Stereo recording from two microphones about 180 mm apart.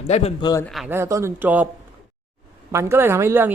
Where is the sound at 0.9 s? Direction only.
15° right (ahead or behind).